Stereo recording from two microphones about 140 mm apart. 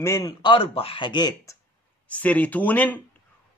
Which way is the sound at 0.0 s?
25° left (ahead or behind).